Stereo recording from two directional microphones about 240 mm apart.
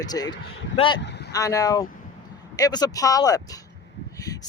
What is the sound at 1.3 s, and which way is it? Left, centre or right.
Speech, centre.